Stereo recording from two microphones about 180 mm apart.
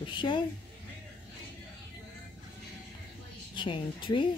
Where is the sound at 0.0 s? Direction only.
25° left (ahead or behind).